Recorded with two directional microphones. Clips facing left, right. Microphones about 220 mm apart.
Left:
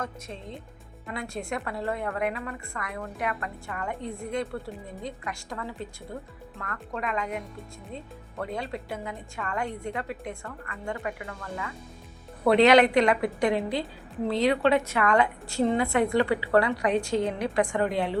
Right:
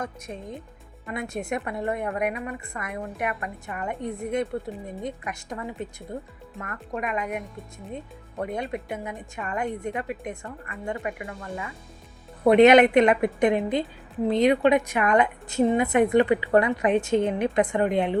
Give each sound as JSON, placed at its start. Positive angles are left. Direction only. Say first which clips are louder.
{"t": 1.1, "sound": "speech", "louder": "right 3 dB", "side_deg": -20}